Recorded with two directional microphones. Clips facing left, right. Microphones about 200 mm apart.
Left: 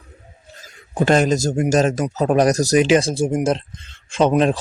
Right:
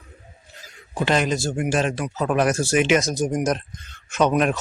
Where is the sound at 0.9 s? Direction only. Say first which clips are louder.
Left 5 dB; 45° left (ahead or behind).